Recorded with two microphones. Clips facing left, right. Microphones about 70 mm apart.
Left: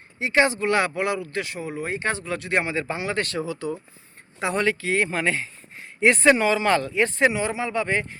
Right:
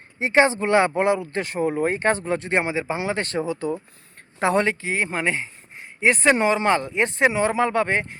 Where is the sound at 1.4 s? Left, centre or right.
Right.